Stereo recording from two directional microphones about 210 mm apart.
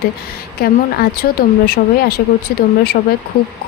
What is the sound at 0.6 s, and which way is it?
Speech, 45° left (ahead or behind).